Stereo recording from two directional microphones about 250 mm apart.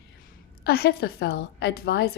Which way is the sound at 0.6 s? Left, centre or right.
Left.